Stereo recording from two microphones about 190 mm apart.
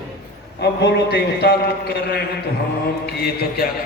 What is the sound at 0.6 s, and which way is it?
A man's voice, 60° left (ahead or behind).